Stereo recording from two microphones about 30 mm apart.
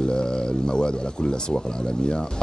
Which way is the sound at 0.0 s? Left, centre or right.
Left.